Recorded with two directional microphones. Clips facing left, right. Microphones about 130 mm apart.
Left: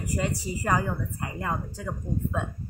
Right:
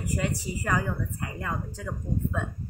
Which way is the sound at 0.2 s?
30° left (ahead or behind).